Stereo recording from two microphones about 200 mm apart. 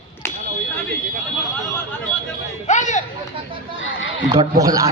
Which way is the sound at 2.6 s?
35° left (ahead or behind).